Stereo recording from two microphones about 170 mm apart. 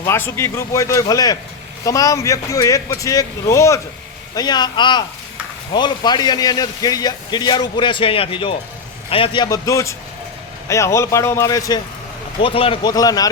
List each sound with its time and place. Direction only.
0.0 s a man's voice: 15° left (ahead or behind)
12.4 s a man's voice: 35° left (ahead or behind)